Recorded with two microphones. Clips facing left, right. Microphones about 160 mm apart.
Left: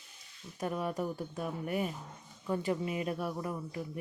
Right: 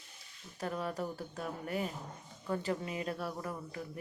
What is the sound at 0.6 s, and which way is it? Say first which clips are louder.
Speech: left 3 dB; 15° left (ahead or behind).